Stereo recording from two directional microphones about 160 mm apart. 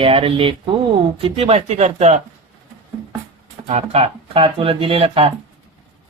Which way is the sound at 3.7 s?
40° right (ahead or behind).